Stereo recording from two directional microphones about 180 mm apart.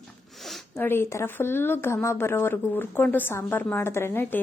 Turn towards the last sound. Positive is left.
turn(degrees=10)  # may be behind; listen again after turning